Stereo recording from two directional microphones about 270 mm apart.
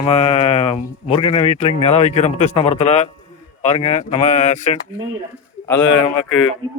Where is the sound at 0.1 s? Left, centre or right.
Left.